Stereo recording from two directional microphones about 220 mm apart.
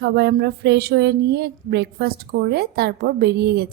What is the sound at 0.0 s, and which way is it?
A woman's voice, 50° right (ahead or behind).